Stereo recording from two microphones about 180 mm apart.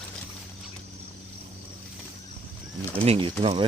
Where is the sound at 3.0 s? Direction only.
30° right (ahead or behind).